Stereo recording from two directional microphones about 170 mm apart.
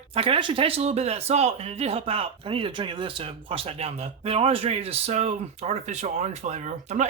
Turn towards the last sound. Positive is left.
turn(degrees=-45)  # may be behind; listen again after turning